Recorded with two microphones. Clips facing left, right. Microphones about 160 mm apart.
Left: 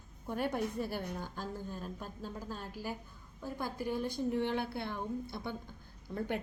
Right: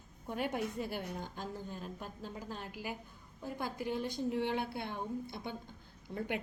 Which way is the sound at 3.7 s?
15° right (ahead or behind).